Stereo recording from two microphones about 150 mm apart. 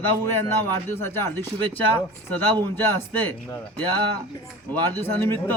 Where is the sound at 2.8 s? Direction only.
15° left (ahead or behind).